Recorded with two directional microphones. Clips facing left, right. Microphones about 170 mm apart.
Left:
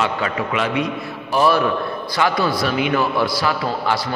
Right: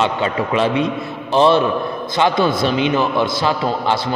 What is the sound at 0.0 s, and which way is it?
A man's voice, 30° right (ahead or behind).